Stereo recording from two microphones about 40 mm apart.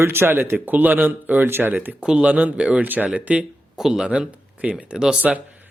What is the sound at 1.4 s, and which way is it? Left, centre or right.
Speech, right.